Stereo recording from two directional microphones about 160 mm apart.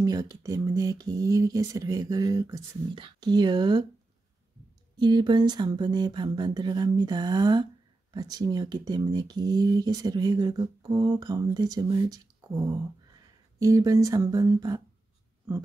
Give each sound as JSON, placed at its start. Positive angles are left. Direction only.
{"t": 0.0, "sound": "speech", "side_deg": -25}
{"t": 4.9, "sound": "speech", "side_deg": -30}